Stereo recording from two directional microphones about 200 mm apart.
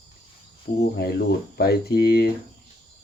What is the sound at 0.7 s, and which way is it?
Speech, 35° left (ahead or behind).